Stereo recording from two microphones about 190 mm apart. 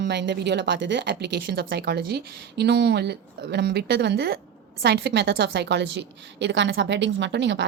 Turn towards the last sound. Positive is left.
turn(degrees=-70)  # may be behind; listen again after turning